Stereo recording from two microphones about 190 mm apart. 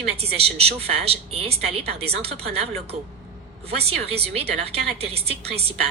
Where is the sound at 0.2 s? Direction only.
30° right (ahead or behind).